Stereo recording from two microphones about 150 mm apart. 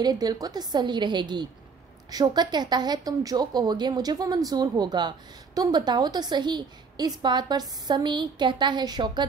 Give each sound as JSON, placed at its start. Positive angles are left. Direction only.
{"t": 0.0, "sound": "a woman's voice", "side_deg": -25}